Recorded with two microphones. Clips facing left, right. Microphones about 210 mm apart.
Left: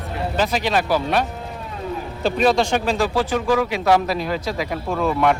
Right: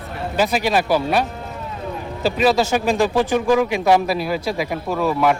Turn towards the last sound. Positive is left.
turn(degrees=-5)  # may be behind; listen again after turning